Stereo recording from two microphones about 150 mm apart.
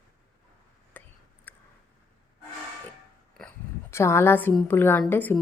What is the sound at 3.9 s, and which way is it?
A woman's voice, 15° left (ahead or behind).